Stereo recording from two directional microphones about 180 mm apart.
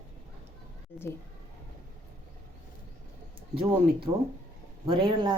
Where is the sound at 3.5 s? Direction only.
30° right (ahead or behind).